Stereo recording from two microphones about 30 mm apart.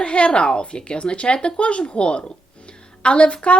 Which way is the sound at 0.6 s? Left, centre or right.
Left.